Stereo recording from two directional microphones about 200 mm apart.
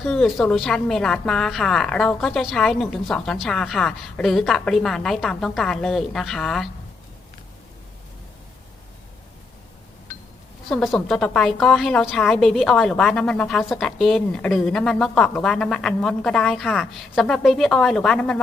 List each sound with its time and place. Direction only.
0.0 s a woman's voice: 5° left (ahead or behind)
10.7 s a woman's voice: centre (ahead or behind)